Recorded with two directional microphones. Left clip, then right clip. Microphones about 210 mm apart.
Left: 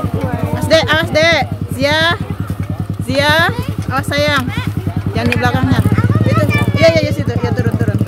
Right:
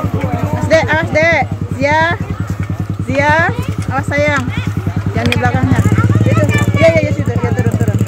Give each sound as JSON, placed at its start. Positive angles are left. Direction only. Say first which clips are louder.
{"t": 0.7, "sound": "music", "louder": "even", "side_deg": 5}
{"t": 3.1, "sound": "speech", "louder": "even", "side_deg": 0}
{"t": 6.5, "sound": "vehicle", "louder": "even", "side_deg": 20}
{"t": 6.8, "sound": "vehicle", "louder": "even", "side_deg": 5}